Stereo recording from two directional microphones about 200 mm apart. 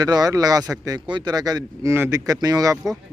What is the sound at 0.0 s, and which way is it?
A man's voice, 20° right (ahead or behind).